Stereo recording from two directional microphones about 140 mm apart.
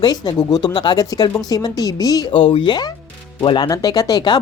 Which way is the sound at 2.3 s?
40° left (ahead or behind).